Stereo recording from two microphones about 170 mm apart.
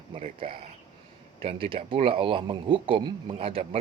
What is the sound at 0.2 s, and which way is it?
Speech, 35° right (ahead or behind).